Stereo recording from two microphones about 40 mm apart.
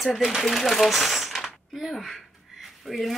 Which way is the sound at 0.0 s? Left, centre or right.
Centre.